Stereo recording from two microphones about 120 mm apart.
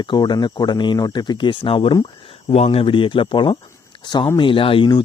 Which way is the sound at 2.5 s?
60° left (ahead or behind).